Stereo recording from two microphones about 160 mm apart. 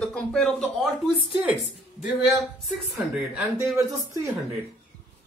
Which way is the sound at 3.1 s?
10° right (ahead or behind).